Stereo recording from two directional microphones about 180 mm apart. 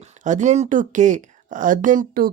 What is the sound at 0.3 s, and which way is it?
Speech, 40° right (ahead or behind).